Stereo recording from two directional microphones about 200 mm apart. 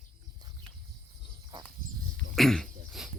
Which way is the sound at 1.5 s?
20° right (ahead or behind).